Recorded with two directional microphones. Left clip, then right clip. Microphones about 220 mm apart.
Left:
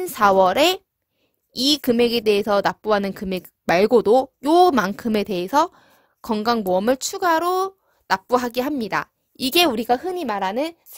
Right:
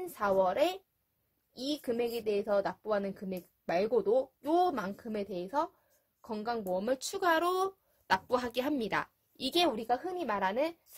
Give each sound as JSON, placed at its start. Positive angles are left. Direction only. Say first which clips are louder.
{"t": 0.0, "sound": "speech", "louder": "left 14 dB", "side_deg": 50}